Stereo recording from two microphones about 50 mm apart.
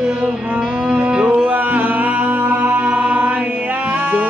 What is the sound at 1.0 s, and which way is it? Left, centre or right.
Music, right.